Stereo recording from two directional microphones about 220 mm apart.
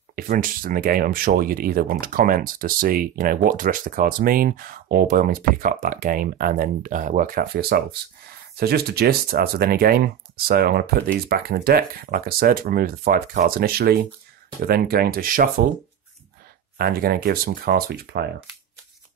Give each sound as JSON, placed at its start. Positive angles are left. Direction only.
{"t": 0.1, "sound": "speech", "side_deg": -40}
{"t": 16.7, "sound": "speech", "side_deg": -45}